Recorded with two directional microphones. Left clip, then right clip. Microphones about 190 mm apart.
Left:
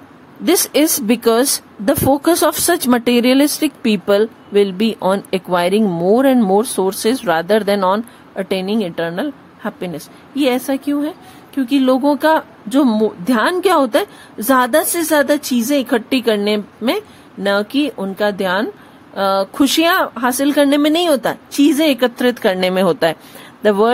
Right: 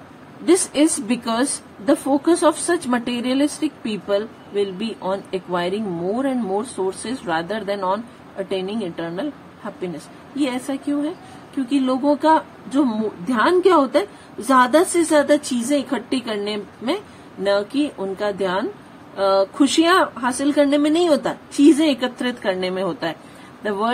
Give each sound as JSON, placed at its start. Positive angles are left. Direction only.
{"t": 0.5, "sound": "a woman's voice", "side_deg": 60}